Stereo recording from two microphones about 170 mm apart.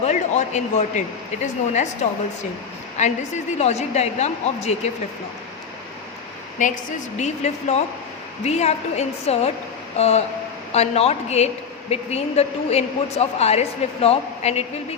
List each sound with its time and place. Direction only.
0.0 s a woman's voice: 45° left (ahead or behind)
7.2 s a woman's voice: 45° left (ahead or behind)